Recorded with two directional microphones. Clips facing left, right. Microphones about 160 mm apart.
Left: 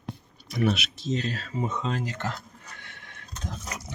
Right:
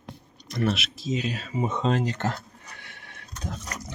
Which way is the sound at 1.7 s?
25° right (ahead or behind).